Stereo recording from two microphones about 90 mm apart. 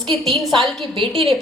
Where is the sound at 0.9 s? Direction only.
75° right (ahead or behind).